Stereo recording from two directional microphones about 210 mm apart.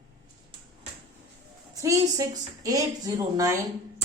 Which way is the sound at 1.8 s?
15° right (ahead or behind).